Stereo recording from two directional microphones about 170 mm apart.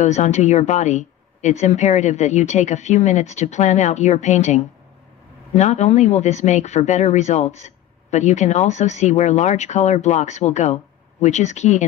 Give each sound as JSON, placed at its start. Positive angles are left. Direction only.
{"t": 0.0, "sound": "speech", "side_deg": 45}